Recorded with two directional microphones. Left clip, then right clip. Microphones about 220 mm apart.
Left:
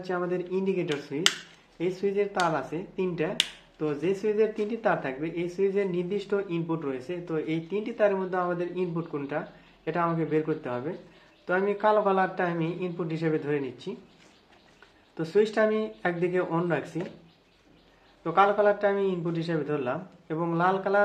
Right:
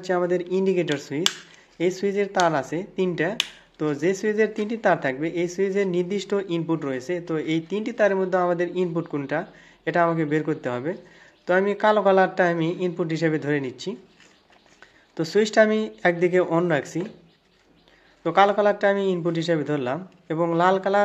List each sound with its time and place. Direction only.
0.0 s speech: 45° right (ahead or behind)
15.1 s speech: 45° right (ahead or behind)
18.2 s speech: 45° right (ahead or behind)